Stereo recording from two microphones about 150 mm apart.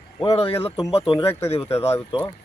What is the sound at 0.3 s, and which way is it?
Speech, 40° left (ahead or behind).